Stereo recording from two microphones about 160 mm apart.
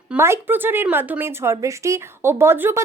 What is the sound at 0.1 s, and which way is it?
A woman's voice, 15° right (ahead or behind).